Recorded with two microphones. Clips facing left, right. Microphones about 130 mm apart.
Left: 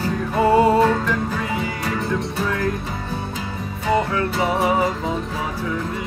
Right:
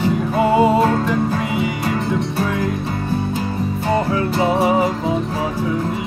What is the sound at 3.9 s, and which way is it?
Music, 30° right (ahead or behind).